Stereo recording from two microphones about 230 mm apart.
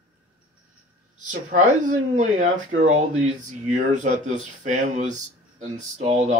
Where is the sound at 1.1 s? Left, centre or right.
Right.